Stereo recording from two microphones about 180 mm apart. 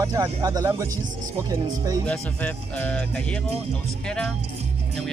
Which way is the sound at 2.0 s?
5° left (ahead or behind).